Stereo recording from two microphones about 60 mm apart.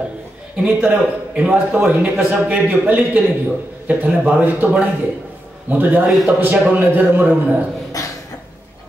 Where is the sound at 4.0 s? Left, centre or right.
Right.